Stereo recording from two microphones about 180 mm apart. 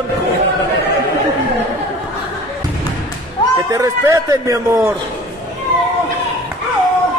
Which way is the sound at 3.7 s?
20° right (ahead or behind).